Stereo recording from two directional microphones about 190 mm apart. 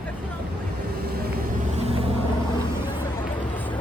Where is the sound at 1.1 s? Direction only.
50° right (ahead or behind).